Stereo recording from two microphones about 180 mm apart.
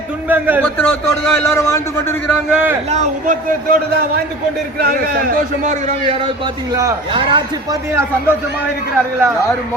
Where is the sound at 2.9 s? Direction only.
45° right (ahead or behind).